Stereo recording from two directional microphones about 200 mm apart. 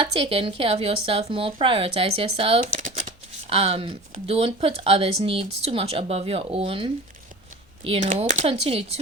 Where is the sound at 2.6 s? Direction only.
40° right (ahead or behind).